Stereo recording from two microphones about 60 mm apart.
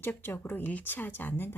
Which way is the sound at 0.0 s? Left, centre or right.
Left.